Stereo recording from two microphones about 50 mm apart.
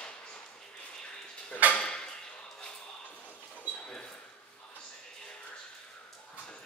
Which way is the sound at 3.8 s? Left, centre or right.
Left.